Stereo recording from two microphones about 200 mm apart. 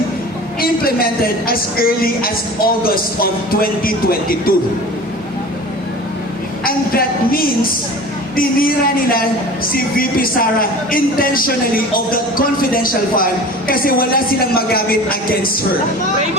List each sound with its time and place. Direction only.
0.6 s a woman's voice: 50° left (ahead or behind)
6.7 s a woman's voice: 45° left (ahead or behind)